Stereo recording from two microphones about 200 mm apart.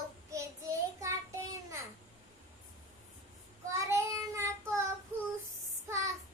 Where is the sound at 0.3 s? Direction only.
15° right (ahead or behind).